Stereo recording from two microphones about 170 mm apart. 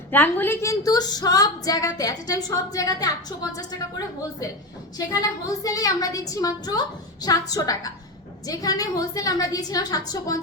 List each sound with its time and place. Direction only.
0.1 s speech: 10° left (ahead or behind)
4.9 s speech: 20° left (ahead or behind)